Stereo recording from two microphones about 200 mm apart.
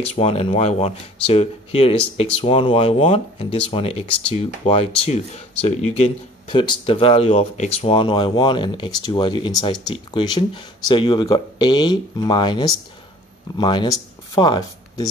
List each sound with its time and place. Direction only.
0.0 s speech: 30° left (ahead or behind)